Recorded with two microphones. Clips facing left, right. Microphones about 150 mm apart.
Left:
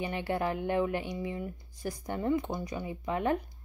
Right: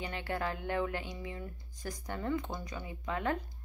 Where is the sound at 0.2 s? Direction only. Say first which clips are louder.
Left 4 dB; 20° left (ahead or behind).